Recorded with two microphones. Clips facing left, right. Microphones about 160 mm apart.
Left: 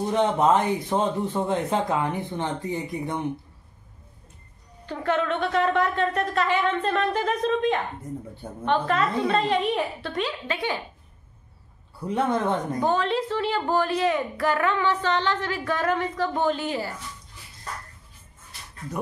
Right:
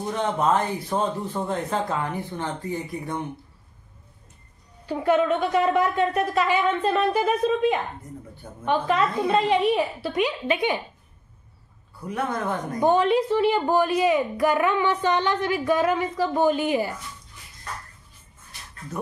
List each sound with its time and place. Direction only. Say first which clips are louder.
0.1 s speech: left 2 dB; 20° left (ahead or behind)
4.8 s a woman's voice: right 4 dB; 10° right (ahead or behind)
12.1 s speech: left 3 dB; 25° left (ahead or behind)
12.8 s a woman's voice: right 7 dB; 15° right (ahead or behind)